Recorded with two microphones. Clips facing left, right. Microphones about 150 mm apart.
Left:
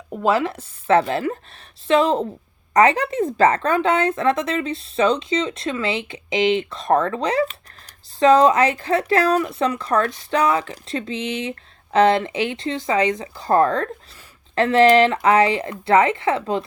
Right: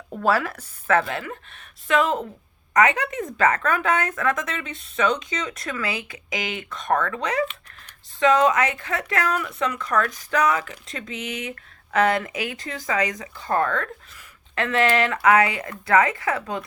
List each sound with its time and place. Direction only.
0.1 s a woman's voice: 20° left (ahead or behind)